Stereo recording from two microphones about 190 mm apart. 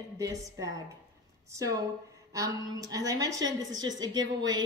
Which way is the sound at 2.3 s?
15° right (ahead or behind).